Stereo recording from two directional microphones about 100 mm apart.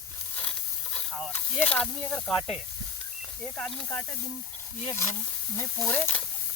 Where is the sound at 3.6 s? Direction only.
5° left (ahead or behind).